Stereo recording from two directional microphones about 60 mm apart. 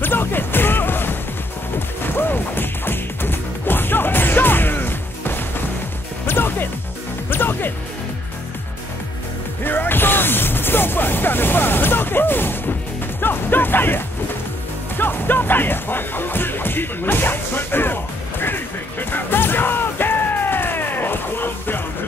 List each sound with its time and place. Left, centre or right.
0.0 s music: left
9.6 s music: left